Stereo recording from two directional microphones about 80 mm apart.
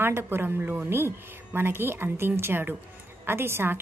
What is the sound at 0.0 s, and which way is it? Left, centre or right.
A woman's voice, right.